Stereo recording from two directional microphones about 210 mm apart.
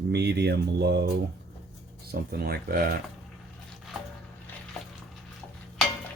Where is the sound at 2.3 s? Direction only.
45° right (ahead or behind).